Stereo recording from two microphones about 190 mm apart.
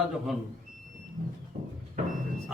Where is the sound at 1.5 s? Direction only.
40° right (ahead or behind).